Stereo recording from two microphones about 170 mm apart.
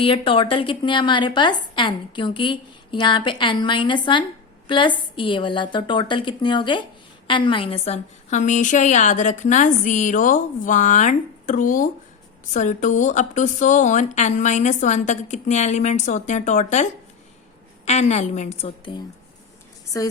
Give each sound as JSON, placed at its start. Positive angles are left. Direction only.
{"t": 0.0, "sound": "a woman's voice", "side_deg": 30}
{"t": 19.9, "sound": "a woman's voice", "side_deg": 20}